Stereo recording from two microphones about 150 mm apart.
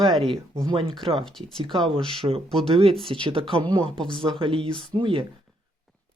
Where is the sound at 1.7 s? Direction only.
35° right (ahead or behind).